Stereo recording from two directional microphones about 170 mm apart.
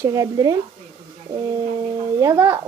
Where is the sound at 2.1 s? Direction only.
15° right (ahead or behind).